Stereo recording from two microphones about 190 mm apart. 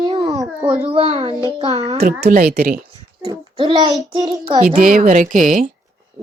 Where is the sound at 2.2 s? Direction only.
55° right (ahead or behind).